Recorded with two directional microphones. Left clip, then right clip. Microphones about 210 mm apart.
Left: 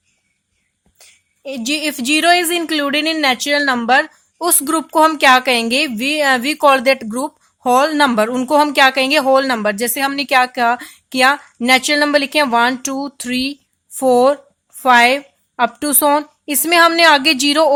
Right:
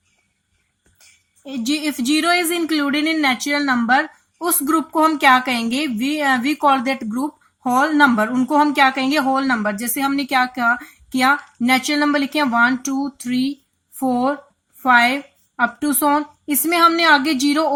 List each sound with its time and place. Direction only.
1.5 s speech: 45° left (ahead or behind)